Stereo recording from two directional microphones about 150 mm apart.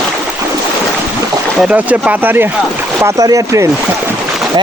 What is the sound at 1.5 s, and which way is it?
Speech, 5° right (ahead or behind).